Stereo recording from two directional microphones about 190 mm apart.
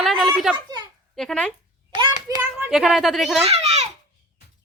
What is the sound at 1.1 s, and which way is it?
Speech, 5° left (ahead or behind).